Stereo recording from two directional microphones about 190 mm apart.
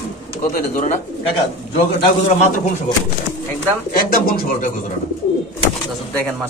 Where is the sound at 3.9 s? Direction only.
50° left (ahead or behind).